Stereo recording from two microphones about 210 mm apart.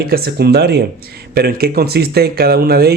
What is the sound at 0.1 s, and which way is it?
Speech, 45° right (ahead or behind).